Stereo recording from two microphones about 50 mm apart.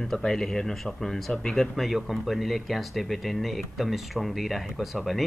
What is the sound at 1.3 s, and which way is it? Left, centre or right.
Speech, centre.